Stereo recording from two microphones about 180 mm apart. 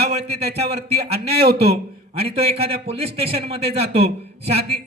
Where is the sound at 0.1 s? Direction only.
35° right (ahead or behind).